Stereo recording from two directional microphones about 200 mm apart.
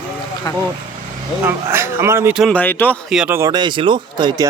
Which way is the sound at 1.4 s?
10° right (ahead or behind).